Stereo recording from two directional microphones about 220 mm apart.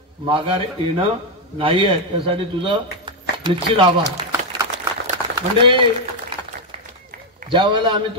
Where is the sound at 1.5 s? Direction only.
25° right (ahead or behind).